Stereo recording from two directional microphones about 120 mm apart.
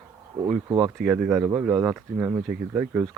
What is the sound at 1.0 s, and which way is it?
Speech, 5° right (ahead or behind).